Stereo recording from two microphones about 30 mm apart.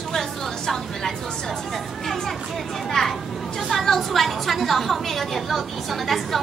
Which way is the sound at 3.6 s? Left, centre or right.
Centre.